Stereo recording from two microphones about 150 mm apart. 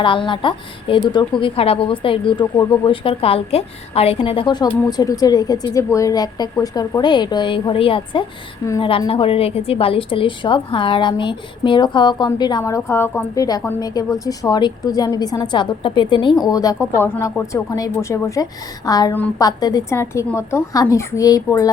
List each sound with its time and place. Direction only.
0.0 s a woman's voice: 35° left (ahead or behind)
2.9 s a woman's voice: 40° left (ahead or behind)